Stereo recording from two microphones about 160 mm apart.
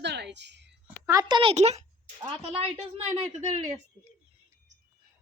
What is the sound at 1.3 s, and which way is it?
Speech, 30° right (ahead or behind).